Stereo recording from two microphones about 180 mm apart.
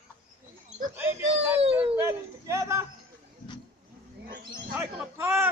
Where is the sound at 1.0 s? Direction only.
10° right (ahead or behind).